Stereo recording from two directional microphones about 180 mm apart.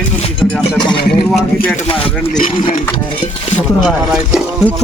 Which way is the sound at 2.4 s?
45° left (ahead or behind).